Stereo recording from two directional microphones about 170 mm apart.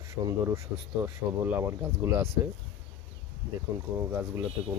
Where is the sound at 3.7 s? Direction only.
15° right (ahead or behind).